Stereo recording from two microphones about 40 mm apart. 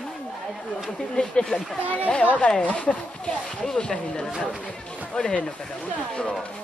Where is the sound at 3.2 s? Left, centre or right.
Centre.